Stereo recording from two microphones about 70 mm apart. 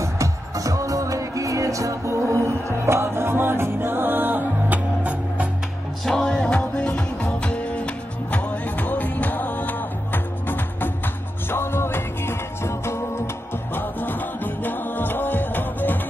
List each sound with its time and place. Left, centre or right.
0.0 s music: right
6.0 s music: centre; by 13.2 s left
13.7 s music: left